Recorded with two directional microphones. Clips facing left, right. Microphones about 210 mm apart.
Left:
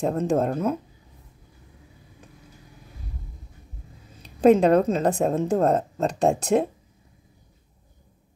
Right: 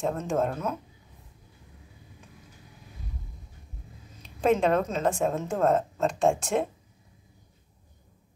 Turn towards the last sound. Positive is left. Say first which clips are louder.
# left 4 dB
turn(degrees=35)  # may be behind; listen again after turning